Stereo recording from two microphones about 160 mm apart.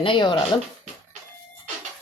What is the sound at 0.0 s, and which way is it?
Speech, 30° left (ahead or behind).